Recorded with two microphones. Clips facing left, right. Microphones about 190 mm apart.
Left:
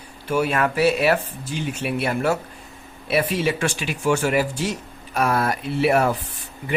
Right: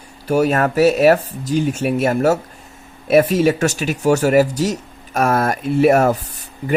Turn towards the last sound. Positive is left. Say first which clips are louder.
# right 6 dB
turn(degrees=-45)  # may be behind; listen again after turning